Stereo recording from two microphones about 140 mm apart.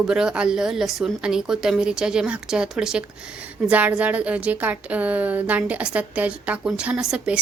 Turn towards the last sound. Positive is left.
turn(degrees=-10)  # may be behind; listen again after turning